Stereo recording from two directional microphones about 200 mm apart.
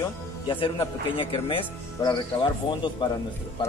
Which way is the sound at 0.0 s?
25° left (ahead or behind).